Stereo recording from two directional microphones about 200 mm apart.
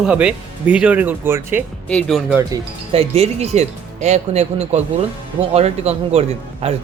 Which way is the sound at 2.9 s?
30° right (ahead or behind).